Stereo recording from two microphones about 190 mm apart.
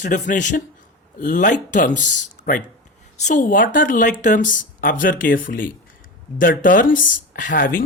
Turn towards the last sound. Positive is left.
turn(degrees=45)  # may be behind; listen again after turning